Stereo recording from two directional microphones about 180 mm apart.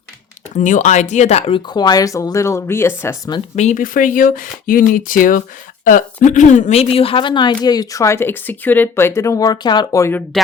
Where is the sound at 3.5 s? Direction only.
45° left (ahead or behind); by 10.2 s 15° left (ahead or behind).